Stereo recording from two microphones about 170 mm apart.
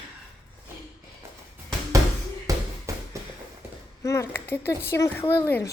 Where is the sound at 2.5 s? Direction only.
20° right (ahead or behind).